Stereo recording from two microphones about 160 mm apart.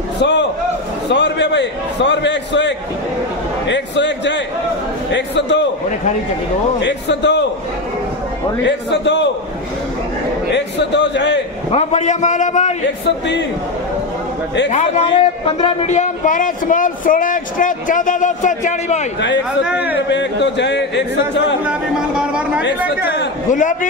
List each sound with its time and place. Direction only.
0.2 s a man's voice: 90° left
6.8 s a man's voice: 90° left
8.6 s a man's voice: 90° left
10.5 s a man's voice: 90° left
11.7 s a man's voice: 45° left (ahead or behind)
14.7 s a man's voice: 45° left (ahead or behind)
15.1 s a man's voice: 35° left (ahead or behind)
19.6 s a man's voice: 10° right (ahead or behind)
20.1 s a man's voice: 90° left
21.6 s speech: 5° right (ahead or behind)
22.8 s a man's voice: 90° left
23.5 s a man's voice: 55° left (ahead or behind)